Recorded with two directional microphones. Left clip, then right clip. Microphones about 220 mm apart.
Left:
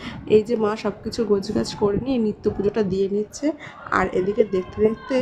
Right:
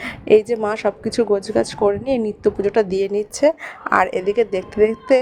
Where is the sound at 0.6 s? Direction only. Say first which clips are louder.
Right 4 dB; 25° right (ahead or behind).